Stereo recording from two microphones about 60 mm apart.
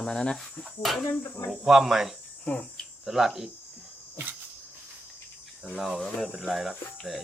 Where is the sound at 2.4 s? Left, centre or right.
Centre.